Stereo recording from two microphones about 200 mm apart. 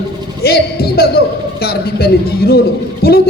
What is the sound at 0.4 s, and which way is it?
A man's voice, 50° left (ahead or behind).